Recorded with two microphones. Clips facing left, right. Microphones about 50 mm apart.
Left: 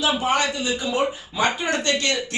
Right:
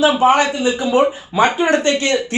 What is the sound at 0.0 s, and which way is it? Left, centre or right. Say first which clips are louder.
Speech: right 8 dB; right.